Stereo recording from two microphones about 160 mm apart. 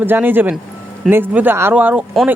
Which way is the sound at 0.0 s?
10° right (ahead or behind).